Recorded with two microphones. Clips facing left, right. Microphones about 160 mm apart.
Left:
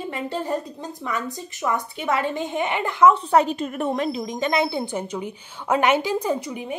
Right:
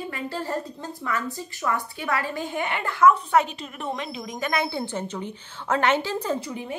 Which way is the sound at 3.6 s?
50° left (ahead or behind).